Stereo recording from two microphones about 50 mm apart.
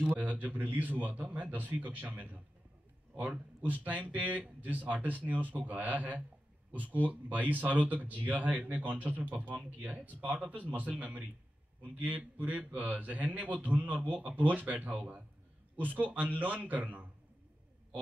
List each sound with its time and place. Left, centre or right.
0.0 s speech: right